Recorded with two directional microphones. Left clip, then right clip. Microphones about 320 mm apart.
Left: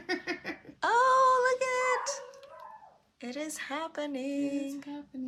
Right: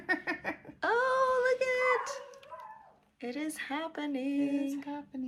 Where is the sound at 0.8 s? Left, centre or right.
Centre.